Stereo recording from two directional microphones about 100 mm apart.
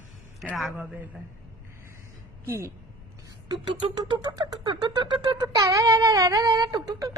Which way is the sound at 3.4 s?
50° right (ahead or behind).